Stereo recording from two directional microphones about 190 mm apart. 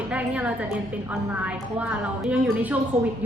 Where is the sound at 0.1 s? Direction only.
5° right (ahead or behind).